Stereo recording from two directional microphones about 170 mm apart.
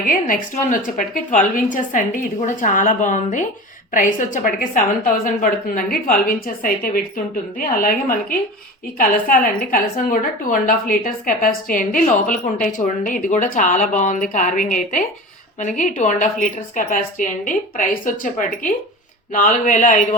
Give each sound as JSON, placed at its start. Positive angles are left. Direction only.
{"t": 0.1, "sound": "a woman's voice", "side_deg": 50}